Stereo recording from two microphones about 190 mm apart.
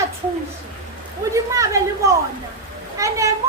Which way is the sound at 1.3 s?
15° right (ahead or behind).